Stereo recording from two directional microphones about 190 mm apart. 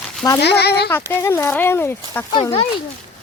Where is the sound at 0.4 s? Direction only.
60° left (ahead or behind).